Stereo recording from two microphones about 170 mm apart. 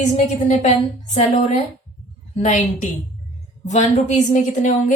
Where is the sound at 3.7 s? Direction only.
45° left (ahead or behind).